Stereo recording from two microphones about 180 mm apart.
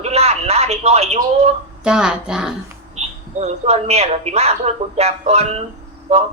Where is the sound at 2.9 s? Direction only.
40° right (ahead or behind).